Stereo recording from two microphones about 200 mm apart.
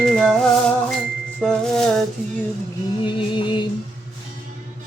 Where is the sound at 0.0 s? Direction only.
Centre (ahead or behind).